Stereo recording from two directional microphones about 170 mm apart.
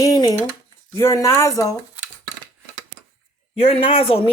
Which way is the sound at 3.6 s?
35° left (ahead or behind).